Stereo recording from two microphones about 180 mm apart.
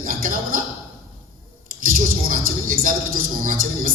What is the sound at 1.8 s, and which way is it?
Speech, 50° right (ahead or behind).